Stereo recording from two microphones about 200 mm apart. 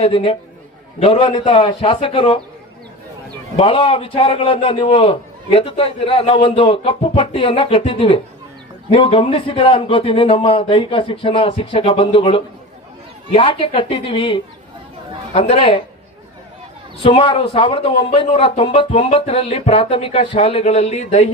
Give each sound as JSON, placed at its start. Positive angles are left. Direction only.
{"t": 0.0, "sound": "a man's voice", "side_deg": 25}
{"t": 3.6, "sound": "a man's voice", "side_deg": 25}
{"t": 17.0, "sound": "a man's voice", "side_deg": 25}